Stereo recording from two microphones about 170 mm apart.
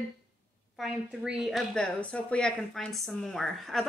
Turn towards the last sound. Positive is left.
turn(degrees=0)  # may be behind; listen again after turning